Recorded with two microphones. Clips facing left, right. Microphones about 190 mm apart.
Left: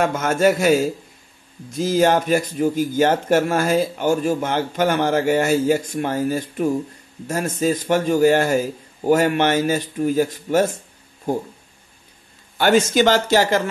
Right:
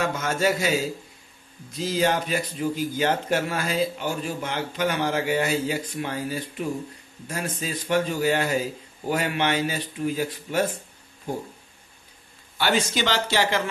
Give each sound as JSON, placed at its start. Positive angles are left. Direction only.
{"t": 0.0, "sound": "speech", "side_deg": 50}
{"t": 12.5, "sound": "speech", "side_deg": 50}